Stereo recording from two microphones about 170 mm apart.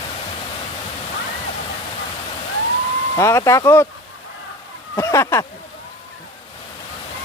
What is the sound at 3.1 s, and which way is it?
Speech, 15° left (ahead or behind).